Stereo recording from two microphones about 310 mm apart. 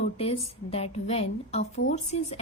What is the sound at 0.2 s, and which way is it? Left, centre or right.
Speech, centre.